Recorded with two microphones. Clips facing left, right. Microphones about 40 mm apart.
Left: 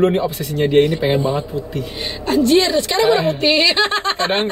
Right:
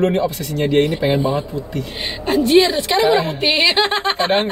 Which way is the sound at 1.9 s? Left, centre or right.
Right.